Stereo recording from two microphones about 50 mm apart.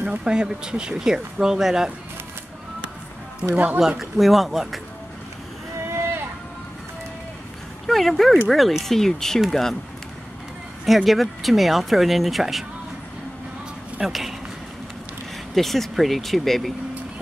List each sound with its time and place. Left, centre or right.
0.0 s speech: right
3.5 s speech: right
4.0 s speech: centre
7.8 s speech: centre
11.1 s speech: centre
14.0 s speech: centre
15.5 s speech: centre